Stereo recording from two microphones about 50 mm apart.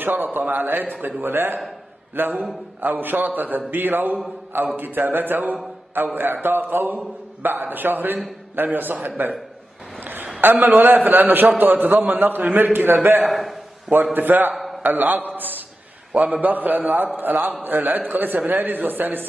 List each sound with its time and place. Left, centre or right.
0.0 s a man's voice: right
9.9 s a sound: right
10.4 s a man's voice: right
13.2 s a man's voice: centre
14.1 s a man's voice: right